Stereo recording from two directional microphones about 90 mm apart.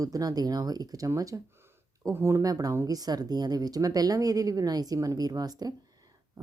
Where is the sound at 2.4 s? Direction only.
40° right (ahead or behind).